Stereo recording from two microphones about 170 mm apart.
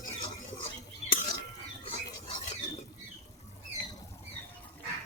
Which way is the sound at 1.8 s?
30° left (ahead or behind).